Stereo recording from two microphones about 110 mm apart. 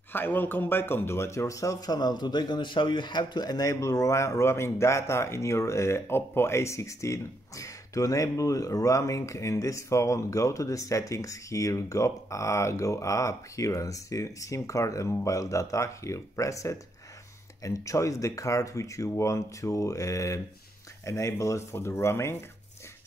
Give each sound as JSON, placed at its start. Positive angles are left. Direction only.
{"t": 0.1, "sound": "speech", "side_deg": 15}